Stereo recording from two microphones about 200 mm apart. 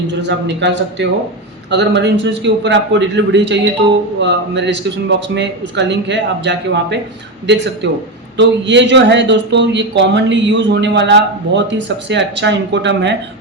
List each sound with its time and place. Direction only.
0.1 s speech: 60° right (ahead or behind)